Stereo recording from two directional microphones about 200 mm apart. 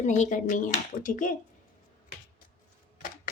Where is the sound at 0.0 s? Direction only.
35° left (ahead or behind).